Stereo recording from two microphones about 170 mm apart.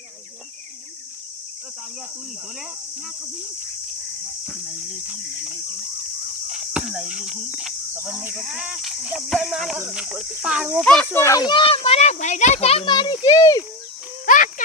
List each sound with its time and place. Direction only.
4.4 s speech: 5° right (ahead or behind)
10.8 s a child's voice: 5° left (ahead or behind); by 13.7 s 20° left (ahead or behind)
14.3 s a sound: 50° left (ahead or behind)